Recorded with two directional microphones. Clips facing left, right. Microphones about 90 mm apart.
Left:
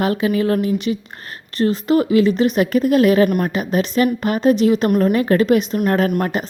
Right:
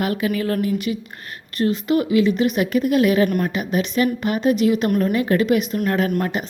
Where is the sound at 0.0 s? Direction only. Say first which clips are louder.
Left 4 dB; 30° left (ahead or behind).